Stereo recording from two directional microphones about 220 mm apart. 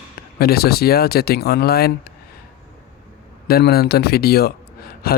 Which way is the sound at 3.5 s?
45° left (ahead or behind).